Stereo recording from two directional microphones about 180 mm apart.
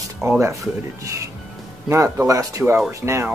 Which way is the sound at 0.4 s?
15° right (ahead or behind).